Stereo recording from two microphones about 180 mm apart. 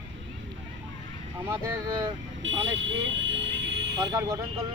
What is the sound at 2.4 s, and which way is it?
Speech, 90° right.